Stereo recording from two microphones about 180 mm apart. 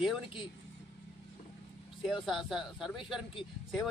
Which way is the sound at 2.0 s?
Centre (ahead or behind).